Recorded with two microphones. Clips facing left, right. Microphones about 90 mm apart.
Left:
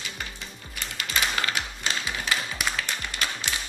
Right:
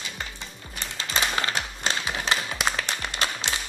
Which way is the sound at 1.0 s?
30° right (ahead or behind).